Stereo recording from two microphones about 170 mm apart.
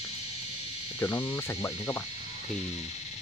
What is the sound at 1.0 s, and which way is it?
Insect, 15° left (ahead or behind).